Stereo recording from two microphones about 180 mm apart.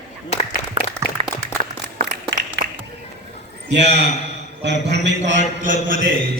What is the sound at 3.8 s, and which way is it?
A man's voice, 70° right (ahead or behind).